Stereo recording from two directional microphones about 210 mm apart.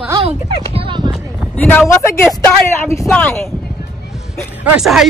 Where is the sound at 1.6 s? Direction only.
10° left (ahead or behind).